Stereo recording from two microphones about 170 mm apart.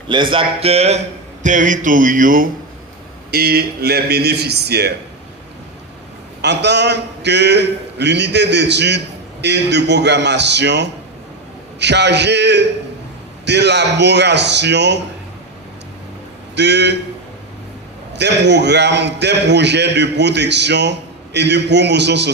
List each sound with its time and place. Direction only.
0.1 s a man's voice: 30° right (ahead or behind); by 2.5 s 55° right (ahead or behind)
3.3 s a man's voice: 65° right (ahead or behind)
6.4 s a man's voice: 90° right
16.6 s a man's voice: 90° right
18.1 s a man's voice: 90° right